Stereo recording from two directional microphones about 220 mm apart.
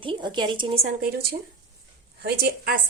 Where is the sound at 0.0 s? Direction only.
20° right (ahead or behind).